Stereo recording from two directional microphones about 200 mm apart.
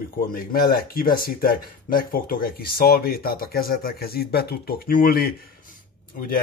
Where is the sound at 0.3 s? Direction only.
45° left (ahead or behind).